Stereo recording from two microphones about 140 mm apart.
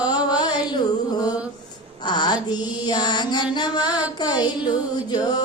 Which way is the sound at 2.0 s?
30° left (ahead or behind).